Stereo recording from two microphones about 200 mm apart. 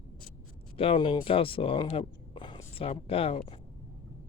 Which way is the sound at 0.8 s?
25° left (ahead or behind).